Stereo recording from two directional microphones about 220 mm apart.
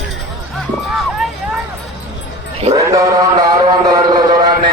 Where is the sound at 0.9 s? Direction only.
Centre (ahead or behind).